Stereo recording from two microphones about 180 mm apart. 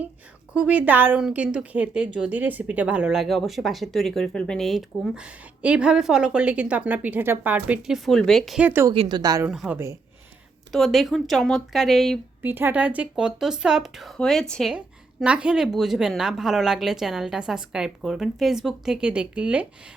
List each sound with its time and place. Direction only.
0.5 s a woman's voice: 5° right (ahead or behind)
8.9 s a woman's voice: 25° right (ahead or behind)
9.5 s speech: 5° right (ahead or behind)
10.7 s a woman's voice: centre (ahead or behind)
12.4 s a woman's voice: 10° right (ahead or behind)